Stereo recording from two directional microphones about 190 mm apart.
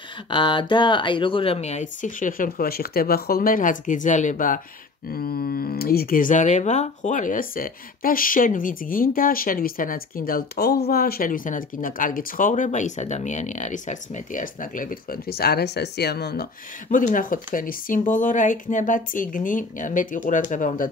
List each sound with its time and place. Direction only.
0.3 s speech: 25° left (ahead or behind); by 4.6 s 40° left (ahead or behind)
5.1 s speech: 55° left (ahead or behind)
16.9 s speech: 45° left (ahead or behind)